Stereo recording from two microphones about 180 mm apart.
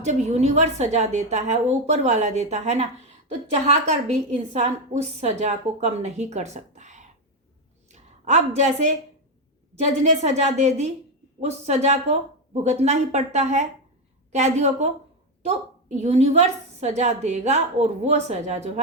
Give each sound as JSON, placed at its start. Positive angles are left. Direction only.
{"t": 0.0, "sound": "a woman's voice", "side_deg": -40}